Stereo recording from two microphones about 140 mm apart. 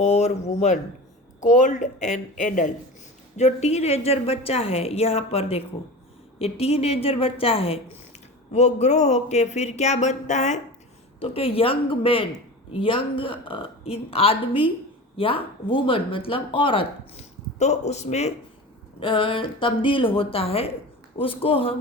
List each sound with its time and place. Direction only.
0.0 s a woman's voice: 55° left (ahead or behind)
8.5 s speech: 55° left (ahead or behind)
11.2 s speech: 40° left (ahead or behind)
17.6 s a woman's voice: 55° left (ahead or behind)
18.9 s speech: 35° left (ahead or behind)